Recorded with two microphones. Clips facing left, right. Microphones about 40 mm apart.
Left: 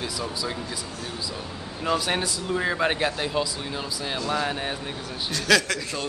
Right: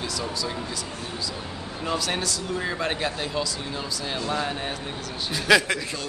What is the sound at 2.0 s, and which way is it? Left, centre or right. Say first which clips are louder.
A man's voice: left 1 dB; left.